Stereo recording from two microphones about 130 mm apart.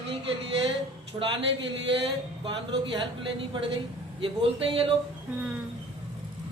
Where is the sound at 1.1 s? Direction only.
30° right (ahead or behind).